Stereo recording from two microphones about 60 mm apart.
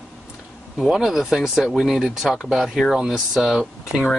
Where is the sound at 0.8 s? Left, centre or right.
Centre.